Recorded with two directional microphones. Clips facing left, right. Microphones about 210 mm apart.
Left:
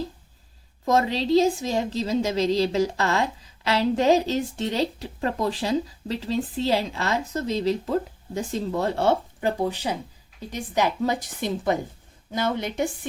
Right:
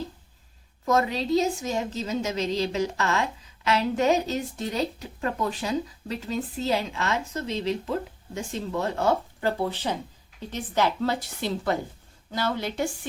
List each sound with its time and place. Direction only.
0.9 s a woman's voice: 30° left (ahead or behind)
9.4 s a woman's voice: 15° left (ahead or behind)